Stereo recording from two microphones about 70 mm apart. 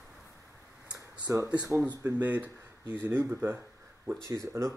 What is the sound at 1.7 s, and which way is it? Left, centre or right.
Speech, right.